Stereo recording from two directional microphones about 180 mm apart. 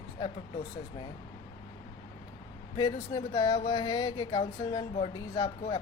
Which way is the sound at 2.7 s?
25° left (ahead or behind).